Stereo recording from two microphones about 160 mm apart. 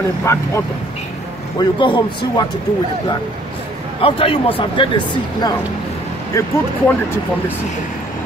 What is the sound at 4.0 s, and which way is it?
A man's voice, 35° left (ahead or behind).